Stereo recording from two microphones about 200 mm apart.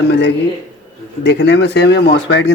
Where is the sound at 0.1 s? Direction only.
55° left (ahead or behind).